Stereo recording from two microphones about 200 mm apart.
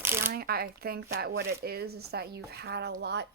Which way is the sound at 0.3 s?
50° right (ahead or behind).